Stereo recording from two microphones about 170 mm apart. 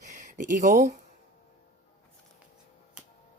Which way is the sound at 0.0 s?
45° right (ahead or behind).